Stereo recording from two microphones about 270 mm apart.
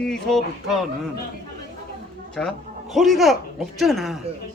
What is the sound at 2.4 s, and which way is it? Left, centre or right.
A man's voice, centre.